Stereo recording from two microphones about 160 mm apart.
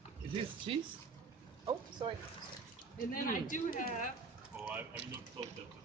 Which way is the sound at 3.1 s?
60° left (ahead or behind).